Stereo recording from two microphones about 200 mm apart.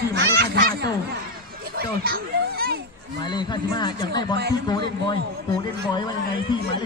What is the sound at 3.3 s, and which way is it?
Speech, 20° left (ahead or behind).